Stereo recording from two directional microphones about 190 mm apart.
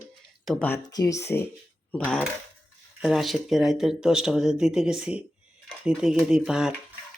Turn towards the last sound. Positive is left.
turn(degrees=-5)  # may be behind; listen again after turning